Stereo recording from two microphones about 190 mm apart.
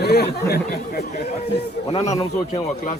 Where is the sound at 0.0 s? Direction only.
60° left (ahead or behind).